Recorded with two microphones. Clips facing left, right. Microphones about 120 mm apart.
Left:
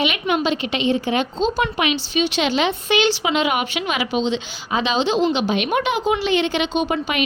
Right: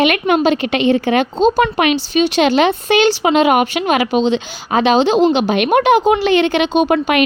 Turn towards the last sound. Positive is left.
turn(degrees=-60)  # may be behind; listen again after turning